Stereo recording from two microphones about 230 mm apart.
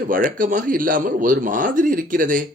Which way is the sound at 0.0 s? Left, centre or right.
Right.